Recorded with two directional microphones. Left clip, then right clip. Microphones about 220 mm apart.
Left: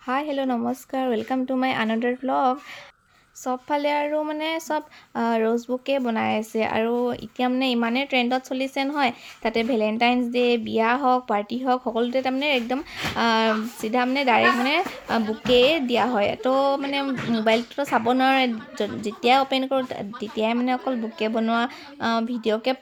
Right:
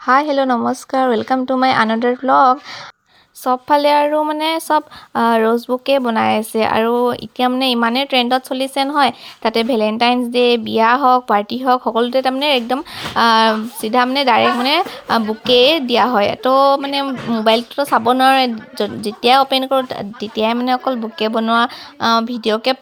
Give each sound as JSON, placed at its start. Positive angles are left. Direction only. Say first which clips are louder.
{"t": 0.0, "sound": "speech", "louder": "right 12 dB", "side_deg": -20}